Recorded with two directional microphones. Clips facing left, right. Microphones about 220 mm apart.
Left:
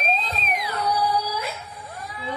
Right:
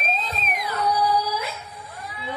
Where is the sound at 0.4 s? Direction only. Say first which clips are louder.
Left 1 dB; 50° right (ahead or behind).